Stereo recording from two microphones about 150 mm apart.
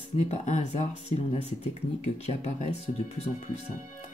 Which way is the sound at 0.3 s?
50° left (ahead or behind).